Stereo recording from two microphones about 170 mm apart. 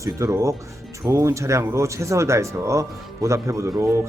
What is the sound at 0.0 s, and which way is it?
A man's voice, 20° right (ahead or behind).